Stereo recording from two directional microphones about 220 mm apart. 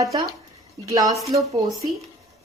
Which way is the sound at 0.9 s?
15° right (ahead or behind).